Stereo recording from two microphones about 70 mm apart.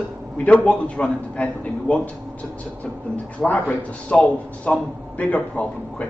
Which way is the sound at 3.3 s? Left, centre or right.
Centre.